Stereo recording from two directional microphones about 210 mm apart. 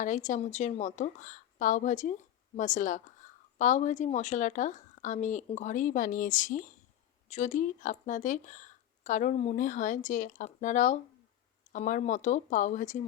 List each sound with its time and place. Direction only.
0.0 s a woman's voice: 35° left (ahead or behind)